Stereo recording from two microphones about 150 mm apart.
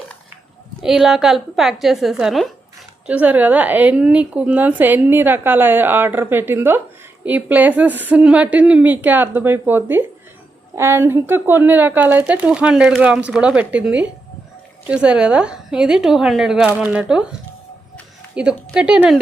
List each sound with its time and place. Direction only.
0.8 s a woman's voice: centre (ahead or behind)
18.3 s a woman's voice: 5° right (ahead or behind)